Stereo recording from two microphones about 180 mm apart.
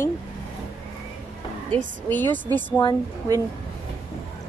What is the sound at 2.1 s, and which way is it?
Speech, 10° left (ahead or behind).